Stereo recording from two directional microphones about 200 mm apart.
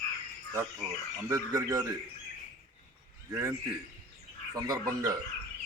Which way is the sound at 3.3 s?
15° right (ahead or behind).